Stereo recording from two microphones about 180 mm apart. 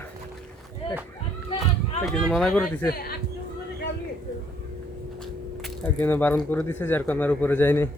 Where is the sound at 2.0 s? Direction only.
5° left (ahead or behind).